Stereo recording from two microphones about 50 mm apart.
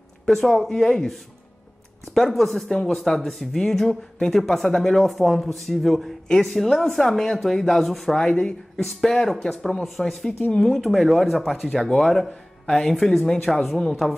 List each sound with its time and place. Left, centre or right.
0.3 s speech: centre
2.1 s a woman's voice: centre